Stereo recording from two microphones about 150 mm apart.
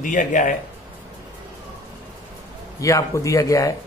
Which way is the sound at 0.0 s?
60° left (ahead or behind).